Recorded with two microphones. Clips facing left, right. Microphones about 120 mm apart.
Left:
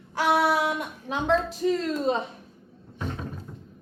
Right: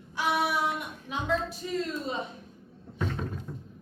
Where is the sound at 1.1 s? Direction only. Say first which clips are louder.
Left 6 dB; 85° left.